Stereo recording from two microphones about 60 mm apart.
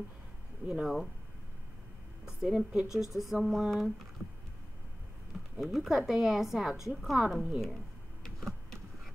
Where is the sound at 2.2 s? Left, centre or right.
Centre.